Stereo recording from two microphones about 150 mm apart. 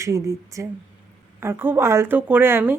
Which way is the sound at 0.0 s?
20° right (ahead or behind).